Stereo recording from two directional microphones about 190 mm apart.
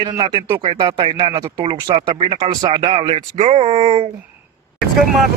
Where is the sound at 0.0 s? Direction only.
25° right (ahead or behind).